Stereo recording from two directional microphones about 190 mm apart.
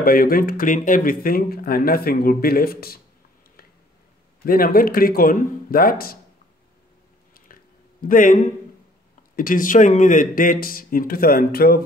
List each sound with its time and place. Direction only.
0.0 s speech: 50° left (ahead or behind)
4.5 s speech: 50° left (ahead or behind)
8.0 s speech: 45° left (ahead or behind)